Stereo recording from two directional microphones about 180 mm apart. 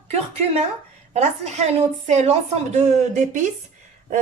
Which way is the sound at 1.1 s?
35° right (ahead or behind).